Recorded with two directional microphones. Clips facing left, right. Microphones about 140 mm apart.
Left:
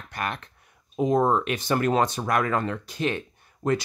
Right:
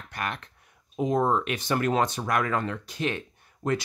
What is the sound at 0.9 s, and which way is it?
Speech, 40° left (ahead or behind).